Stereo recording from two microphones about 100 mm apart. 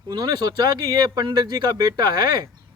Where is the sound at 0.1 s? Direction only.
45° right (ahead or behind).